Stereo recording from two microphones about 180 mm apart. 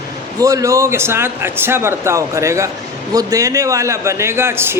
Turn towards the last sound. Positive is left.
turn(degrees=-15)  # may be behind; listen again after turning